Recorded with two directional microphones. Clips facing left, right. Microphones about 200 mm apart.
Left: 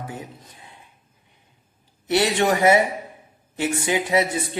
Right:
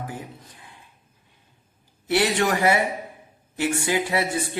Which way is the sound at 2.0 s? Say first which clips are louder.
Left 2 dB; 25° left (ahead or behind).